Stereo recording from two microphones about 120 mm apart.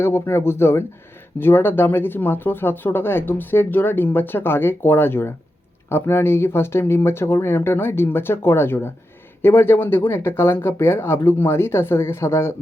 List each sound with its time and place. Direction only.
0.0 s speech: 20° left (ahead or behind)